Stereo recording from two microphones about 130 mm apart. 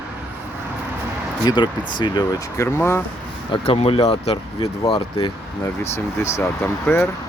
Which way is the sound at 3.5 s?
50° left (ahead or behind).